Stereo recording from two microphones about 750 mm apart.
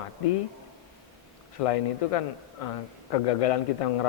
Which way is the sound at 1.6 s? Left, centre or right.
Left.